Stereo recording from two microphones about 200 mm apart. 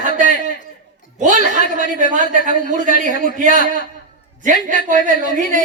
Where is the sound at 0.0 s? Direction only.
40° right (ahead or behind).